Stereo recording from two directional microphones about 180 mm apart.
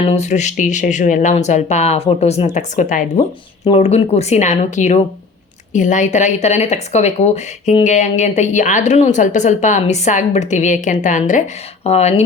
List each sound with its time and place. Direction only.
0.1 s speech: 40° left (ahead or behind)